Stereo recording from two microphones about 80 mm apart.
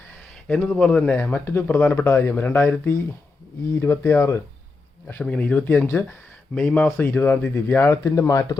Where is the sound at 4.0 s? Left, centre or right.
Left.